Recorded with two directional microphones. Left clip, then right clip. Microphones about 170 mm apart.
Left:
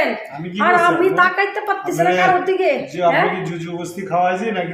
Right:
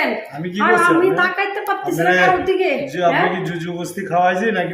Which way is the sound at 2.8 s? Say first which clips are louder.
Even; 10° right (ahead or behind).